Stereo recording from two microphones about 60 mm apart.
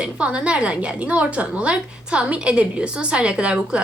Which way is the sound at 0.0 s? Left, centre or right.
Centre.